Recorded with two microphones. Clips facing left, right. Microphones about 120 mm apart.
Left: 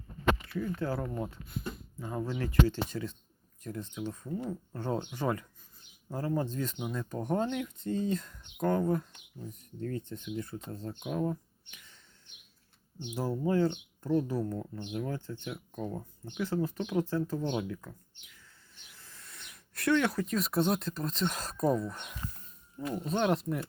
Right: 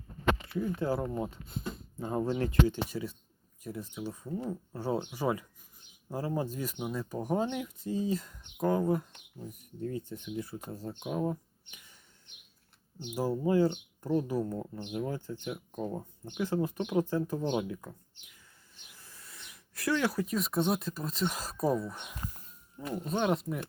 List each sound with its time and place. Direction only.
0.5 s speech: 10° right (ahead or behind)
2.9 s speech: 10° right (ahead or behind)
13.1 s speech: 10° right (ahead or behind)
18.9 s a sound: 15° right (ahead or behind)
19.9 s speech: 10° right (ahead or behind)